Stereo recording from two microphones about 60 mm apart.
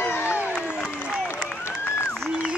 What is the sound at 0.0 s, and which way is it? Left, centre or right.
Crowd, left.